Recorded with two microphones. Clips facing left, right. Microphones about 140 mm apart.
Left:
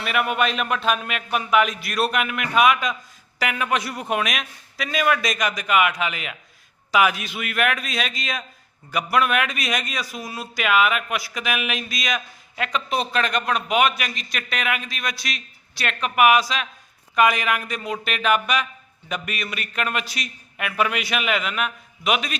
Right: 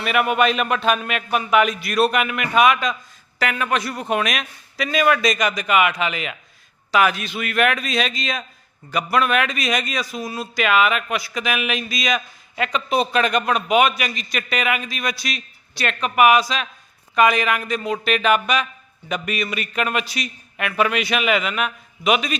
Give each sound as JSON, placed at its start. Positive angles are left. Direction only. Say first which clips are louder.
{"t": 0.0, "sound": "a man's voice", "louder": "right 4 dB", "side_deg": 0}